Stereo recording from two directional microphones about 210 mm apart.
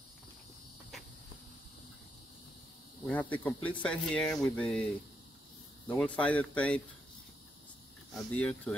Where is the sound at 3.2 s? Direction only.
5° left (ahead or behind).